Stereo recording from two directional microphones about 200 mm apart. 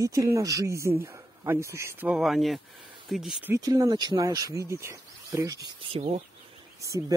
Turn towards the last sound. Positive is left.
turn(degrees=-15)  # may be behind; listen again after turning